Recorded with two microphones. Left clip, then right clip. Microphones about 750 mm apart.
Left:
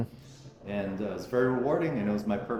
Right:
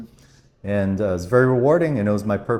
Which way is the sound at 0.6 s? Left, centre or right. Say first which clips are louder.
Right 11 dB; right.